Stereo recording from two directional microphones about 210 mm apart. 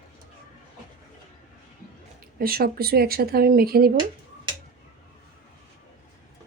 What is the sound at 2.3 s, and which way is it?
Speech, 45° right (ahead or behind).